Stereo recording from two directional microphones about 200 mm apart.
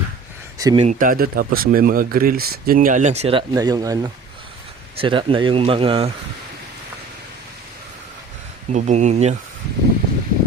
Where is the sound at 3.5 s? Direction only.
20° right (ahead or behind).